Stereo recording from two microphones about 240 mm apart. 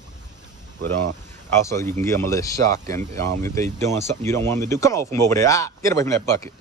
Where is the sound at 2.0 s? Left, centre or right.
Centre.